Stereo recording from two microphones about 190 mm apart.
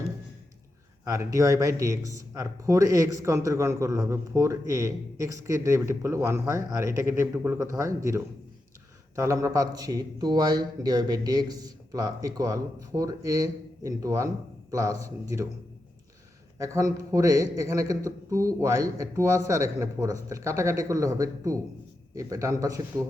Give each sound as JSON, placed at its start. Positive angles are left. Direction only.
{"t": 1.0, "sound": "speech", "side_deg": -15}
{"t": 16.6, "sound": "speech", "side_deg": -15}